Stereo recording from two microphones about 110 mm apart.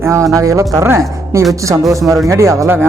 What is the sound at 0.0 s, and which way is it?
Speech, 25° right (ahead or behind).